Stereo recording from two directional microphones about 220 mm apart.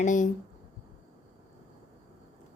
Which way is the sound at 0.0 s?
35° left (ahead or behind).